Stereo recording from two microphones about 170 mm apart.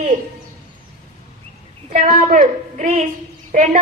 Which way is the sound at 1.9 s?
55° right (ahead or behind).